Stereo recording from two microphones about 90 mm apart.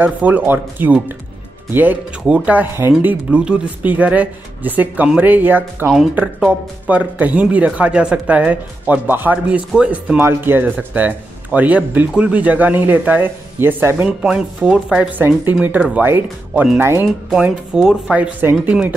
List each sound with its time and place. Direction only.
0.0 s speech: 20° right (ahead or behind)
3.3 s speech: 10° right (ahead or behind)
14.0 s speech: 10° right (ahead or behind)
17.3 s speech: 10° right (ahead or behind)